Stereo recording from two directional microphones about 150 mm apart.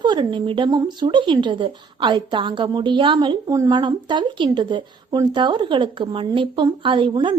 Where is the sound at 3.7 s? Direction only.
30° right (ahead or behind).